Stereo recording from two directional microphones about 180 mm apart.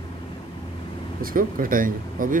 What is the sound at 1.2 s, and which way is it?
Speech, 50° right (ahead or behind).